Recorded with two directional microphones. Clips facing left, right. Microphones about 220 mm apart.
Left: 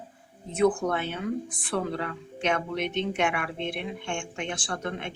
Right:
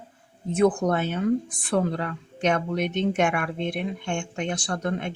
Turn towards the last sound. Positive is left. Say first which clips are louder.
# right 5 dB
turn(degrees=-40)  # may be behind; listen again after turning